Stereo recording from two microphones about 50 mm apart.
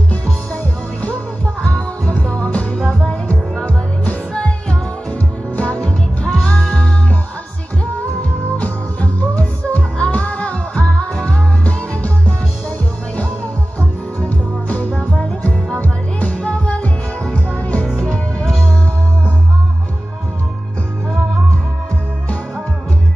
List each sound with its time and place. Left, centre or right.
1.0 s music: left
3.6 s music: left
13.7 s music: left